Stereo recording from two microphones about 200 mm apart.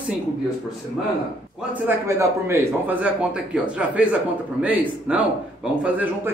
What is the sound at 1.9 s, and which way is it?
Speech, 15° right (ahead or behind).